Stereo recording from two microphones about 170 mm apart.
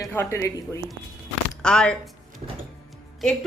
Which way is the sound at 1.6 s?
5° left (ahead or behind).